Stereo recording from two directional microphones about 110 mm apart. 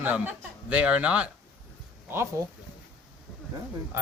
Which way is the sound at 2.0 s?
25° right (ahead or behind).